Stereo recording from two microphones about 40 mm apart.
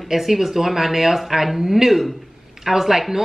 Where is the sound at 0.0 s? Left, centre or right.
Centre.